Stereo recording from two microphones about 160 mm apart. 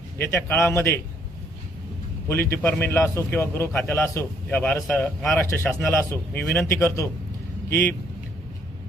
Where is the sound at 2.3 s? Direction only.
10° left (ahead or behind).